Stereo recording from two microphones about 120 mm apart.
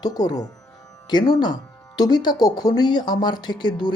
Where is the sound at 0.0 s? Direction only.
35° left (ahead or behind).